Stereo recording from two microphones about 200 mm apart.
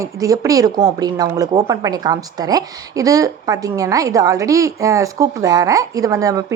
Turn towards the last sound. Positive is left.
turn(degrees=-15)  # may be behind; listen again after turning